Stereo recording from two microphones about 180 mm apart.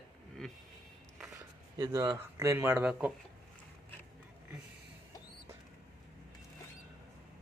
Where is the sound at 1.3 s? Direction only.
20° right (ahead or behind).